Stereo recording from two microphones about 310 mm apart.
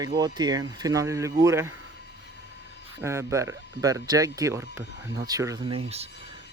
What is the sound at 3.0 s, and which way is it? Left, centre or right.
Speech, centre.